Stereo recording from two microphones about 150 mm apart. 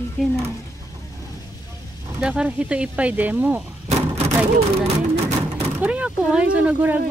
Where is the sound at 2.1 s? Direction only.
5° right (ahead or behind).